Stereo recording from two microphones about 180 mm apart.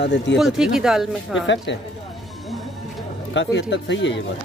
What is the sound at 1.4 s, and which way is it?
Speech, 90° left.